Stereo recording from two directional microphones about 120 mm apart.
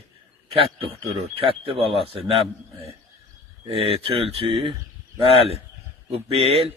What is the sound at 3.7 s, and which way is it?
A man's voice, 55° right (ahead or behind).